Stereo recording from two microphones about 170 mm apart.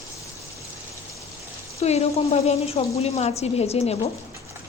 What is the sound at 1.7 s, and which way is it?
A woman's voice, 40° left (ahead or behind).